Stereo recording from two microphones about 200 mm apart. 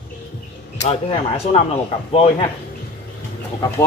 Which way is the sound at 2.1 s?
30° left (ahead or behind).